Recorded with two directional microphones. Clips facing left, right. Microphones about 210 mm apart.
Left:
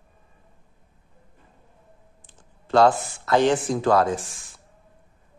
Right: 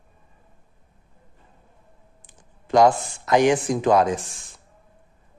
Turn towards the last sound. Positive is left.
turn(degrees=-20)  # may be behind; listen again after turning